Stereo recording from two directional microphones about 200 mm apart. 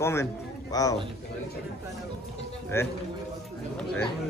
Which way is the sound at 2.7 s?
15° left (ahead or behind).